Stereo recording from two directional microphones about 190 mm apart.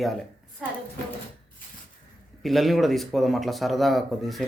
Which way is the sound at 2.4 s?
Centre (ahead or behind).